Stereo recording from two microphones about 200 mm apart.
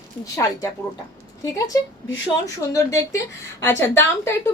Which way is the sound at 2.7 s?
15° left (ahead or behind).